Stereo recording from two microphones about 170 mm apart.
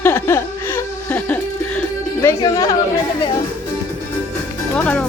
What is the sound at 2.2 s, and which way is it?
Speech, 20° left (ahead or behind).